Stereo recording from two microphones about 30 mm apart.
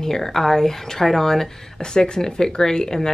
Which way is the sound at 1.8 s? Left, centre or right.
Left.